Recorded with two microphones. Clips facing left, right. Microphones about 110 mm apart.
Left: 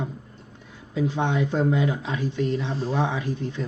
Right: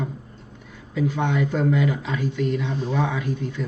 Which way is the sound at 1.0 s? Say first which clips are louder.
Right 1 dB; 30° left (ahead or behind).